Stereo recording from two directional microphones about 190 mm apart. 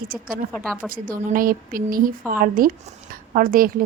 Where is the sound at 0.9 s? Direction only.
45° right (ahead or behind).